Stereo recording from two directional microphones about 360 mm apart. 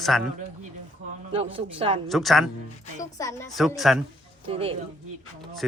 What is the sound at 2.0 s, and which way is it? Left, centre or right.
A woman's voice, centre.